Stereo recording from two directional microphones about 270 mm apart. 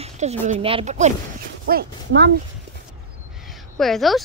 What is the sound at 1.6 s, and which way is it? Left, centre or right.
Speech, right.